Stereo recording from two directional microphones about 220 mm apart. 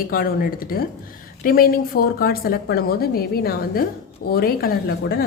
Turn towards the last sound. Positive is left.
turn(degrees=45)  # may be behind; listen again after turning